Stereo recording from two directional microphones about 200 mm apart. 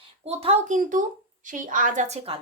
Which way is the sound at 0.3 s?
30° right (ahead or behind).